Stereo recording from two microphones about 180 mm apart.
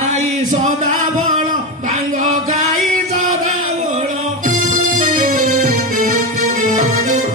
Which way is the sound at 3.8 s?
45° right (ahead or behind).